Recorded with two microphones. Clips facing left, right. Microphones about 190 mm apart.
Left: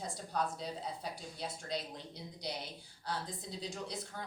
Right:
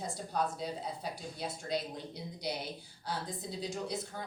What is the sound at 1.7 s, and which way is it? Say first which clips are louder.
Speech: right 5 dB; 5° right (ahead or behind).